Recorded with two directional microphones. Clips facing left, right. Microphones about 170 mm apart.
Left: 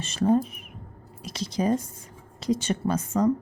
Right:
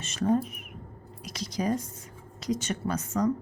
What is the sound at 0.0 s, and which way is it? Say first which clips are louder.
A woman's voice: left 4 dB; 30° left (ahead or behind).